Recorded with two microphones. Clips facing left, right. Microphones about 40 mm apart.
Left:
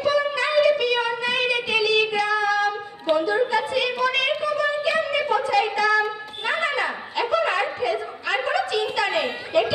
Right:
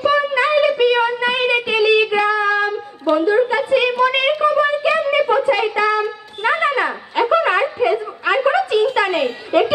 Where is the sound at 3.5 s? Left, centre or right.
Right.